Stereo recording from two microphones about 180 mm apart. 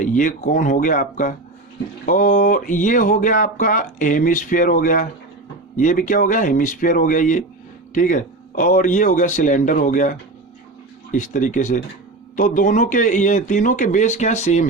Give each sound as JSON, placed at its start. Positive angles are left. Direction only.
{"t": 0.0, "sound": "speech", "side_deg": 45}